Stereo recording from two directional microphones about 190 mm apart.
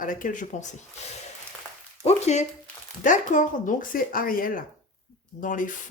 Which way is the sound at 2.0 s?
35° left (ahead or behind).